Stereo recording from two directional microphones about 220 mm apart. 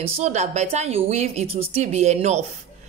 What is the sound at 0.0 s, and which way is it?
A woman's voice, 30° right (ahead or behind).